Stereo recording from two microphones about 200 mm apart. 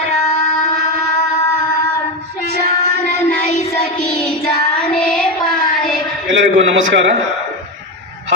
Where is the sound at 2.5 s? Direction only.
55° right (ahead or behind).